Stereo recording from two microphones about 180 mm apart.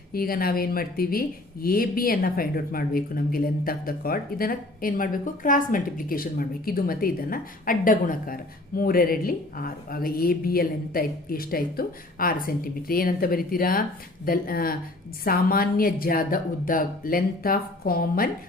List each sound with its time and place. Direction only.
0.1 s a woman's voice: 55° left (ahead or behind)